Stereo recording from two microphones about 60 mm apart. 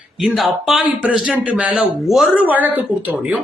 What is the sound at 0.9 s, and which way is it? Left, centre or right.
Speech, right.